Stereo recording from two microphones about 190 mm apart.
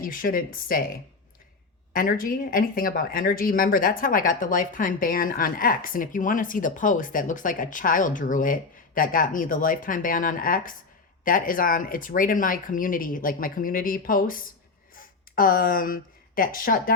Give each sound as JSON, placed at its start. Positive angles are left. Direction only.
{"t": 0.0, "sound": "speech", "side_deg": 50}
{"t": 1.9, "sound": "speech", "side_deg": 50}